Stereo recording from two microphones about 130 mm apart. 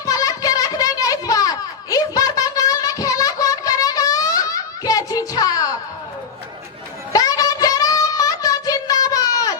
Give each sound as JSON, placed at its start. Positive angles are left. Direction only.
{"t": 0.0, "sound": "children playing", "side_deg": 25}
{"t": 7.1, "sound": "child singing", "side_deg": 30}